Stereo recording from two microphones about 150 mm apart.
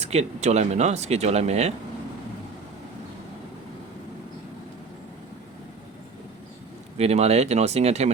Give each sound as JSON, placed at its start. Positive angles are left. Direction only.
{"t": 0.0, "sound": "speech", "side_deg": -45}
{"t": 7.0, "sound": "speech", "side_deg": -45}